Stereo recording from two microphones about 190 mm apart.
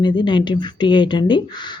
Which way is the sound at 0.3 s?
25° left (ahead or behind).